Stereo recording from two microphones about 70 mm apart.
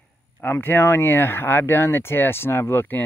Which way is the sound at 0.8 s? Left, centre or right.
Left.